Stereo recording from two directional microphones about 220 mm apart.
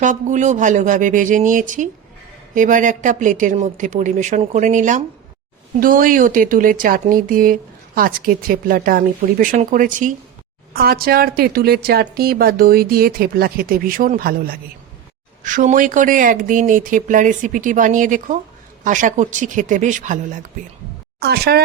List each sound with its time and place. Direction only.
0.0 s a woman's voice: 35° right (ahead or behind)
21.2 s a woman's voice: 45° right (ahead or behind)